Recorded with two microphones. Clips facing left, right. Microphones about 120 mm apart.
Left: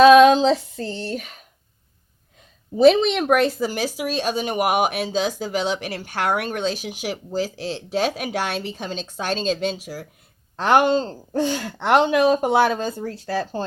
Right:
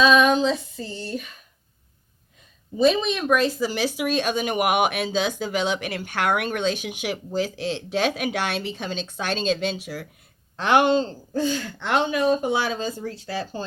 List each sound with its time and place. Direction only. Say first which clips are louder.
0.0 s female singing: left 7 dB; 70° left (ahead or behind); by 1.5 s 85° left
2.7 s speech: left 6 dB; 75° left (ahead or behind); by 11.2 s 40° left (ahead or behind)
11.3 s speech: left 2 dB; 70° left (ahead or behind); by 13.4 s 55° left (ahead or behind)